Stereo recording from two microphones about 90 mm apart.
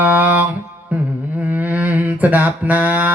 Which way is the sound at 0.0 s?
20° right (ahead or behind).